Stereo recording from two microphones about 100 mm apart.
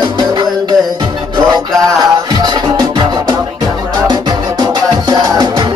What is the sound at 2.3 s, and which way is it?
Music, 45° right (ahead or behind).